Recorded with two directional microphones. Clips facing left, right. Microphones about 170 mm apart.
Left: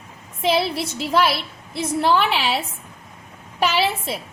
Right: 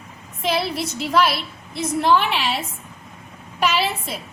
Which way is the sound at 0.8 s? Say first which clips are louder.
Even; 30° left (ahead or behind).